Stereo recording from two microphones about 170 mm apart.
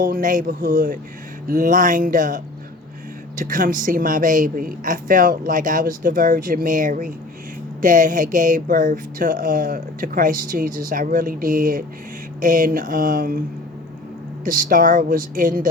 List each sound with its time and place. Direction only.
0.0 s speech: 55° right (ahead or behind)
14.4 s speech: 55° right (ahead or behind)